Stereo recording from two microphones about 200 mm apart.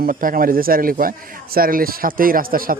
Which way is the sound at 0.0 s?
45° right (ahead or behind).